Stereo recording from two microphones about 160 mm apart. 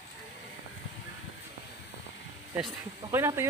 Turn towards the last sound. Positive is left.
turn(degrees=-15)  # may be behind; listen again after turning